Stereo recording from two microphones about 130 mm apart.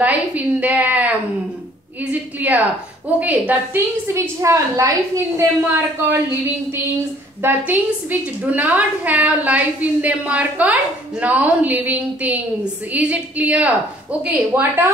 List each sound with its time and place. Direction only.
0.0 s a woman's voice: 10° right (ahead or behind)
2.4 s a woman's voice: 10° right (ahead or behind)
7.4 s a woman's voice: 15° right (ahead or behind)